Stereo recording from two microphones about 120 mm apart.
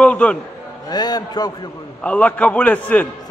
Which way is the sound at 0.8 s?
35° left (ahead or behind).